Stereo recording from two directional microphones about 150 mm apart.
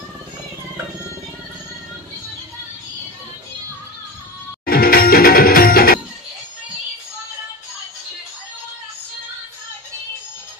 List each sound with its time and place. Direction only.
4.6 s music: 80° left